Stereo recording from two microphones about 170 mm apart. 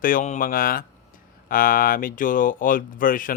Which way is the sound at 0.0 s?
50° left (ahead or behind).